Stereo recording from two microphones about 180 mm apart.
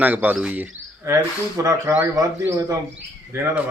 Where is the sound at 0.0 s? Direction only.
10° right (ahead or behind).